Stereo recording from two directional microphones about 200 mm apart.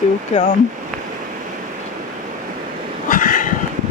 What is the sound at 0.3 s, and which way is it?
Speech, 35° left (ahead or behind).